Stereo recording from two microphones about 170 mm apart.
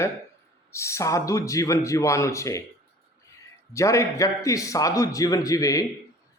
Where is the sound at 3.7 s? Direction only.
15° left (ahead or behind).